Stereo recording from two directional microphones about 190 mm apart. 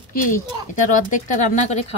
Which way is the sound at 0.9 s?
45° left (ahead or behind).